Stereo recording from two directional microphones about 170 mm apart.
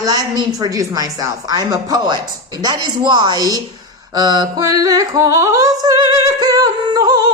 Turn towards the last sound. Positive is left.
turn(degrees=-25)  # may be behind; listen again after turning